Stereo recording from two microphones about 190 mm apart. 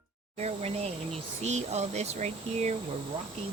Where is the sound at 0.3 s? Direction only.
35° right (ahead or behind).